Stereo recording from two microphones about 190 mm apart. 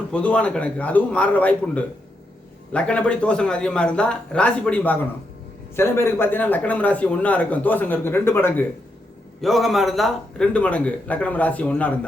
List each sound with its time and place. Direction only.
0.1 s speech: 5° left (ahead or behind)
9.4 s speech: centre (ahead or behind)